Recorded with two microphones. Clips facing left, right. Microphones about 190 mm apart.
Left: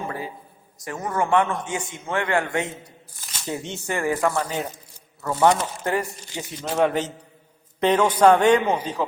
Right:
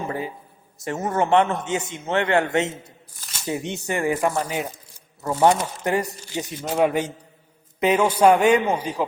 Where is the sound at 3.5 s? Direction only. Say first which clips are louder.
Right 2 dB; 15° right (ahead or behind).